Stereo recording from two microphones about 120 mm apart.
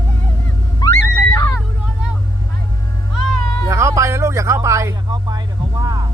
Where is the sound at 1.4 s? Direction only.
20° left (ahead or behind).